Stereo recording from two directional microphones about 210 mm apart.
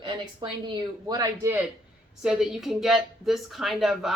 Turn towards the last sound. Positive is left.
turn(degrees=0)  # may be behind; listen again after turning